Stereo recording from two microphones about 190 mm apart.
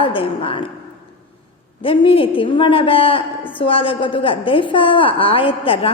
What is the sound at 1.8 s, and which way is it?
A woman's voice, 30° left (ahead or behind).